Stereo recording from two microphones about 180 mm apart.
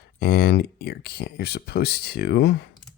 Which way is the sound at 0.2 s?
60° left (ahead or behind).